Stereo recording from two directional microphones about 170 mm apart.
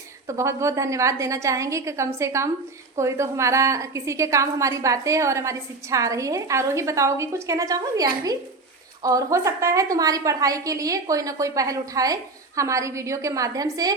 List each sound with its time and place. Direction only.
0.3 s a woman's voice: 15° right (ahead or behind)